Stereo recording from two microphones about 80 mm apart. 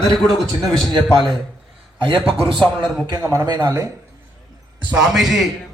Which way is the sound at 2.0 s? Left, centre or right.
Right.